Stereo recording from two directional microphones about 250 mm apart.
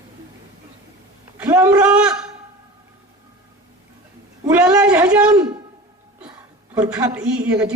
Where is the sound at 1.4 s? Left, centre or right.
Centre.